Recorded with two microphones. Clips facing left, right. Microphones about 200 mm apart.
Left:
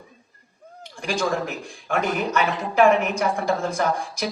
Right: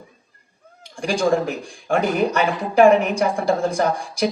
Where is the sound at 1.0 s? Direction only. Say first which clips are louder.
Right 5 dB; 35° right (ahead or behind).